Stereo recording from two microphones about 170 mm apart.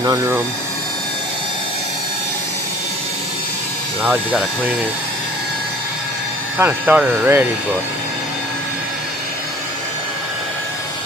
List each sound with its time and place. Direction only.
0.0 s speech: 15° right (ahead or behind)
4.0 s speech: 10° right (ahead or behind)
6.6 s speech: 10° right (ahead or behind)